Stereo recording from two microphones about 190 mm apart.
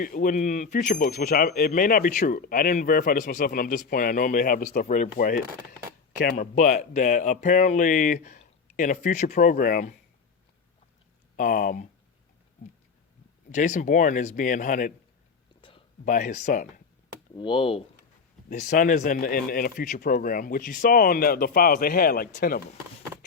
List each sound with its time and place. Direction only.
0.0 s speech: 45° left (ahead or behind)
6.3 s speech: 40° left (ahead or behind)
11.3 s speech: 45° left (ahead or behind)
13.5 s speech: 40° left (ahead or behind)
15.6 s a sound: 30° left (ahead or behind)
16.0 s speech: 40° left (ahead or behind)
17.3 s speech: 25° left (ahead or behind)
18.4 s speech: 40° left (ahead or behind)